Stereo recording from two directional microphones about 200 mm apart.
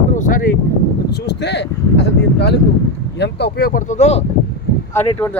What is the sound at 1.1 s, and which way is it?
Speech, 55° left (ahead or behind).